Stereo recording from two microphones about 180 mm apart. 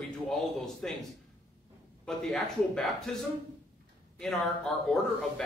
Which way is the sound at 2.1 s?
Centre (ahead or behind).